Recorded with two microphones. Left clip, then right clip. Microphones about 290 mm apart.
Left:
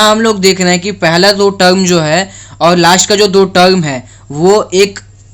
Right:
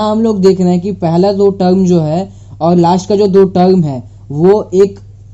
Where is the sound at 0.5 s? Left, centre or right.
Centre.